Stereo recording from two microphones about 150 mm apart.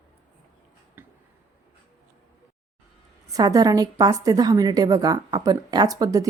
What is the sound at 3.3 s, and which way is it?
A woman's voice, 25° right (ahead or behind).